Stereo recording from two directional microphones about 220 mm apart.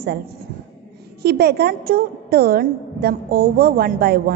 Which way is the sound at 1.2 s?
45° right (ahead or behind).